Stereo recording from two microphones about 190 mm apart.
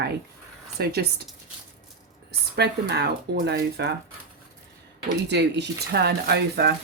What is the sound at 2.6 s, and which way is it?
Speech, 60° right (ahead or behind).